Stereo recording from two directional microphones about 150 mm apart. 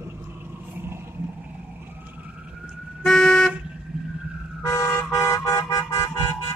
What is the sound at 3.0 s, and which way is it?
Vehicle, 5° left (ahead or behind).